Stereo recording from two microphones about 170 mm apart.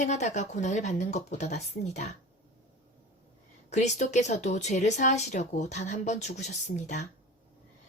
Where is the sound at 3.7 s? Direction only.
45° left (ahead or behind).